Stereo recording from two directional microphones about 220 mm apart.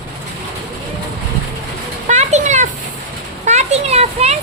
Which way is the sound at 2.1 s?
30° right (ahead or behind).